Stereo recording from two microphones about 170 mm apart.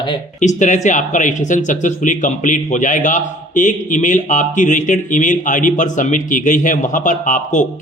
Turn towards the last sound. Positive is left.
turn(degrees=50)  # may be behind; listen again after turning